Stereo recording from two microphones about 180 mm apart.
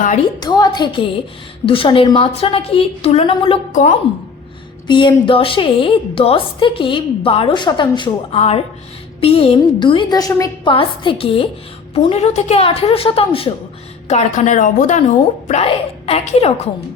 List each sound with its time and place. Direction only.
0.3 s a woman's voice: 20° left (ahead or behind)
3.7 s a woman's voice: 45° left (ahead or behind)
4.9 s a woman's voice: 25° left (ahead or behind)